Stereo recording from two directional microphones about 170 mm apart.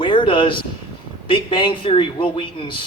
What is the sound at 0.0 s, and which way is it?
Speech, 30° left (ahead or behind).